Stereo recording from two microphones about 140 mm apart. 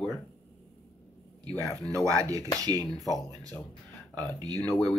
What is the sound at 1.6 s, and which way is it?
Speech, 10° left (ahead or behind).